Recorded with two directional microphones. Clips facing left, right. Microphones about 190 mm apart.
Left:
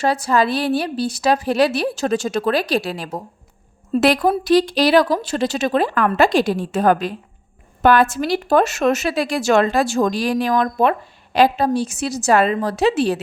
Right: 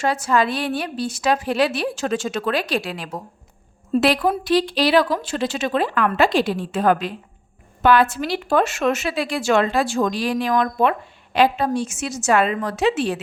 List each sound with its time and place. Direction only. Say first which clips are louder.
0.0 s a woman's voice: left 2 dB; 35° left (ahead or behind)